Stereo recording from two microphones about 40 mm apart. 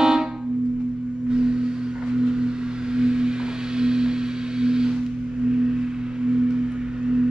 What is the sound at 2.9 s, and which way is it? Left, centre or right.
Singing bowl, centre.